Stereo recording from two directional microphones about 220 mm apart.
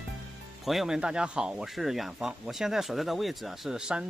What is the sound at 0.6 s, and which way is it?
Speech, centre (ahead or behind).